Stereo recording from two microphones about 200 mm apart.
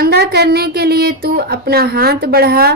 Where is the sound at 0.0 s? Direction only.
50° right (ahead or behind).